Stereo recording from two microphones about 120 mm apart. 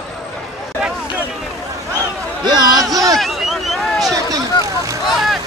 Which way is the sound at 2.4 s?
35° right (ahead or behind).